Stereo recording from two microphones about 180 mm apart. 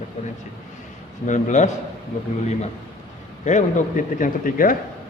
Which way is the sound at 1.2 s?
40° left (ahead or behind).